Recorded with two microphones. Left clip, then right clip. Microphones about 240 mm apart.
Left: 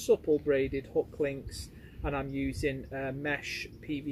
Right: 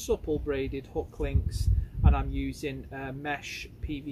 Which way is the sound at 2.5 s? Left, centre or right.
Centre.